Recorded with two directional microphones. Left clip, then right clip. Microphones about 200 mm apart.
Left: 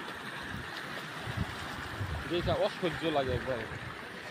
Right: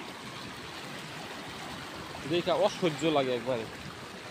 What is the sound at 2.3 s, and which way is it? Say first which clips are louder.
Speech: right 4 dB; 35° right (ahead or behind).